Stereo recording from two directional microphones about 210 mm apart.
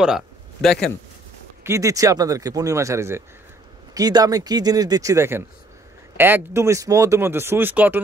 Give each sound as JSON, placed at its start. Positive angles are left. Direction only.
{"t": 0.0, "sound": "a man's voice", "side_deg": 0}
{"t": 1.6, "sound": "speech", "side_deg": -15}